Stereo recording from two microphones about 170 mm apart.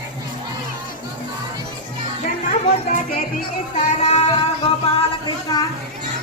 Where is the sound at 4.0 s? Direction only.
40° left (ahead or behind).